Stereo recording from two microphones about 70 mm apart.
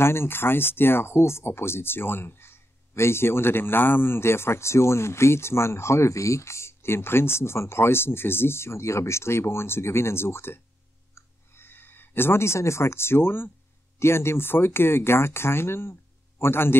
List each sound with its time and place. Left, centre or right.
0.0 s speech: left
11.1 s a sound: left
13.9 s speech: left